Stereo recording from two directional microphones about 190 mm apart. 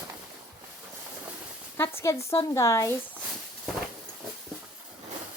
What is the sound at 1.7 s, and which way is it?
Speech, 15° left (ahead or behind).